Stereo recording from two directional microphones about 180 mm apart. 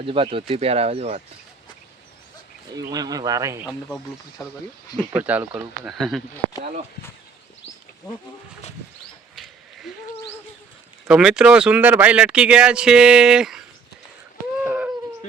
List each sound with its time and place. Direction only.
0.0 s speech: 30° right (ahead or behind)
2.7 s speech: 20° right (ahead or behind)
3.7 s speech: 5° left (ahead or behind)
4.4 s speech: 15° left (ahead or behind)
5.1 s speech: 10° right (ahead or behind)
9.3 s a sound: centre (ahead or behind)
11.0 s speech: 5° right (ahead or behind)
14.6 s a sound: 10° right (ahead or behind)